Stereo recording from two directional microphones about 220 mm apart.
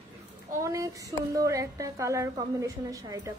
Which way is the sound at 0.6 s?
15° right (ahead or behind).